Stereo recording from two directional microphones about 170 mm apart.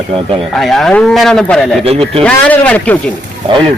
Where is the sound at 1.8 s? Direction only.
35° right (ahead or behind).